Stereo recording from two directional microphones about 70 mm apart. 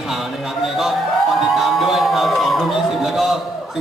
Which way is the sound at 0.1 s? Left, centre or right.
Centre.